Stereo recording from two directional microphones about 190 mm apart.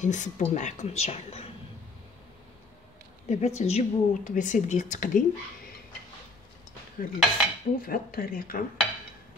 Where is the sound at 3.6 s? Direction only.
35° left (ahead or behind).